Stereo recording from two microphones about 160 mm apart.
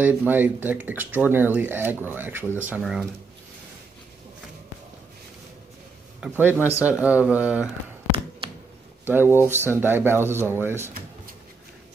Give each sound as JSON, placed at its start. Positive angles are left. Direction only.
{"t": 0.0, "sound": "speech", "side_deg": -10}
{"t": 6.2, "sound": "speech", "side_deg": -10}
{"t": 9.0, "sound": "speech", "side_deg": -10}